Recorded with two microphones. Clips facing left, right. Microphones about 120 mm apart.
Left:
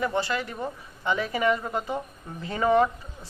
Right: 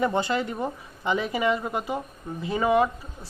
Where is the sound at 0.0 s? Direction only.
20° right (ahead or behind).